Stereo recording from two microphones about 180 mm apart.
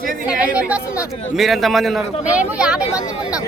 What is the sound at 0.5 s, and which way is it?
Speech, 5° right (ahead or behind).